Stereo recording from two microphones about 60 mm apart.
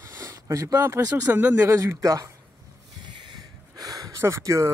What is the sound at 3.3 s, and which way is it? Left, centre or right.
Snort, right.